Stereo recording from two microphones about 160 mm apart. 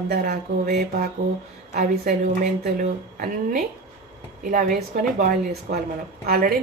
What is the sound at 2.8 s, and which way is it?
A woman's voice, 60° right (ahead or behind).